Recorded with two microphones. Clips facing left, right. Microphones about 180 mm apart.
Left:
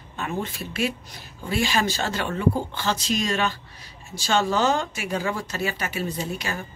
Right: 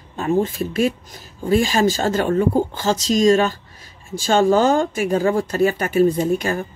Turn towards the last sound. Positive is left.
turn(degrees=-50)  # may be behind; listen again after turning